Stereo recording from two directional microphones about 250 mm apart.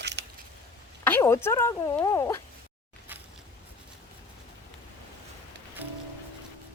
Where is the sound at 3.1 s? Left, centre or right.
Centre.